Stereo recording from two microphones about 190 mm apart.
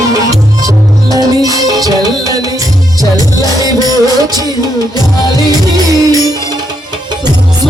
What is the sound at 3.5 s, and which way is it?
Music, 20° right (ahead or behind).